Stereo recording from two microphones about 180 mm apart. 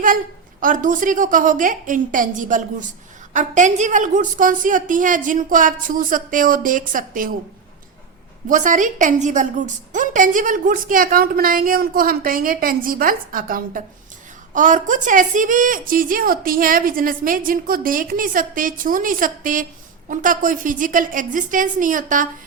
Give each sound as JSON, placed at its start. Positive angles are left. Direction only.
{"t": 0.6, "sound": "a woman's voice", "side_deg": -45}
{"t": 8.4, "sound": "a woman's voice", "side_deg": -45}